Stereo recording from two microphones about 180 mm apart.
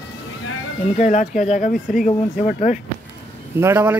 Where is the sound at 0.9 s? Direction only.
45° left (ahead or behind).